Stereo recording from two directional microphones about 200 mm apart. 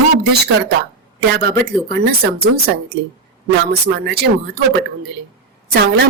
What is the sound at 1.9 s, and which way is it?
Speech, 50° right (ahead or behind).